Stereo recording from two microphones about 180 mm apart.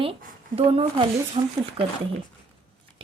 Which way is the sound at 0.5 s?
30° right (ahead or behind).